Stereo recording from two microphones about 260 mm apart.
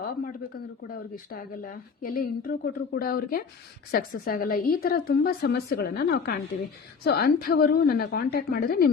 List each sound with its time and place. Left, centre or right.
1.1 s a woman's voice: left